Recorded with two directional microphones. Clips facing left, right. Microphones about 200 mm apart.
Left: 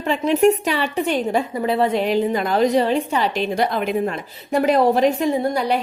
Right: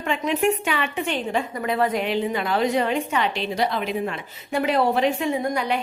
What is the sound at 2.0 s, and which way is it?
A woman's voice, 40° left (ahead or behind).